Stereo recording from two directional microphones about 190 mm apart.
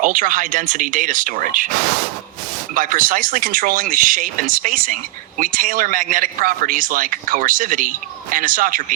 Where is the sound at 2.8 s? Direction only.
45° right (ahead or behind).